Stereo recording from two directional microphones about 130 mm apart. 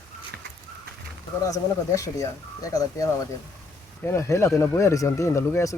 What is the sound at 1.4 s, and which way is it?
Speech, 25° left (ahead or behind).